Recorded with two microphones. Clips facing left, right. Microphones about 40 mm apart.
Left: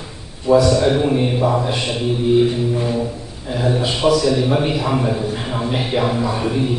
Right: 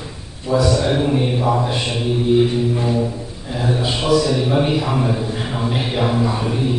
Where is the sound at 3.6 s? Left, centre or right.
Centre.